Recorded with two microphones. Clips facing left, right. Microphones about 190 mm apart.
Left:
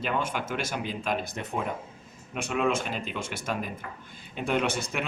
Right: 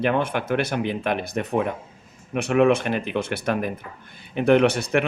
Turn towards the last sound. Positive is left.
turn(degrees=-65)  # may be behind; listen again after turning